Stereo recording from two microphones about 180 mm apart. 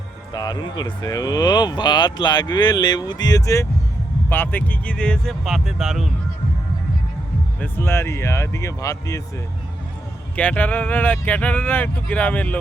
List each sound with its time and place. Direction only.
0.3 s speech: 20° left (ahead or behind); by 6.1 s centre (ahead or behind)
7.6 s speech: 15° left (ahead or behind)
10.3 s speech: 10° left (ahead or behind)